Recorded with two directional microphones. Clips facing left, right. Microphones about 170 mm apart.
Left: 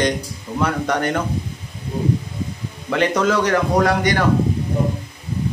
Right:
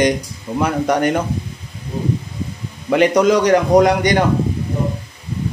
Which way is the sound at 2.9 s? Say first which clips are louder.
Right 5 dB; 15° right (ahead or behind).